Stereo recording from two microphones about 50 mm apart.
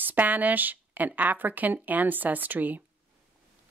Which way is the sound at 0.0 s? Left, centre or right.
Right.